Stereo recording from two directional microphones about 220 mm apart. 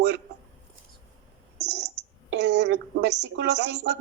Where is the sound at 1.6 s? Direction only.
50° right (ahead or behind).